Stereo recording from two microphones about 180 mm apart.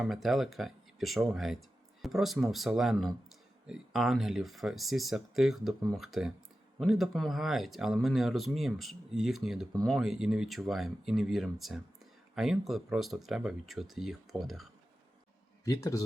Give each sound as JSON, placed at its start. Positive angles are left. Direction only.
{"t": 0.0, "sound": "speech", "side_deg": 0}
{"t": 15.6, "sound": "a man's voice", "side_deg": 20}